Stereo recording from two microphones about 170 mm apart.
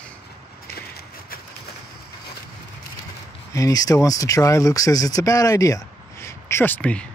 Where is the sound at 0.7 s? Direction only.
65° left (ahead or behind).